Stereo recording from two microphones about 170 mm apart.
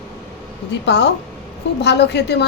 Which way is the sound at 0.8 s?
90° left.